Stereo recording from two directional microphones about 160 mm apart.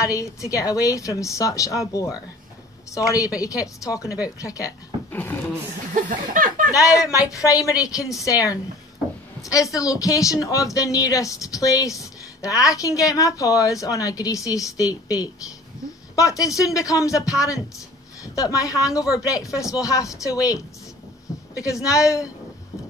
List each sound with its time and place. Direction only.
0.1 s speech: 20° left (ahead or behind)
6.0 s a sound: 55° right (ahead or behind)
6.7 s speech: 20° left (ahead or behind)
21.5 s speech: 20° left (ahead or behind)